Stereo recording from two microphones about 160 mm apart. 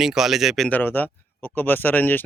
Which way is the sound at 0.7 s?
10° left (ahead or behind).